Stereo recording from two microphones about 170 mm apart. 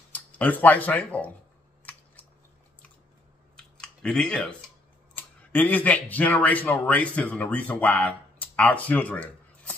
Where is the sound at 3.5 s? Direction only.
5° left (ahead or behind).